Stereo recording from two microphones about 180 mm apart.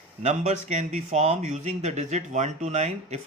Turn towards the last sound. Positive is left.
turn(degrees=-40)  # may be behind; listen again after turning